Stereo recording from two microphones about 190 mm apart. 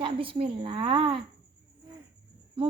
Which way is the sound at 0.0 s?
30° right (ahead or behind).